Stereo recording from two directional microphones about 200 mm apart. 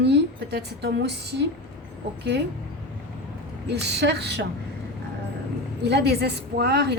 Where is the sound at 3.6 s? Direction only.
55° right (ahead or behind).